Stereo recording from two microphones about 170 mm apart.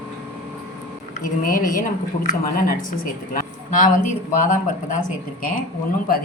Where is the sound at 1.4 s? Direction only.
55° left (ahead or behind).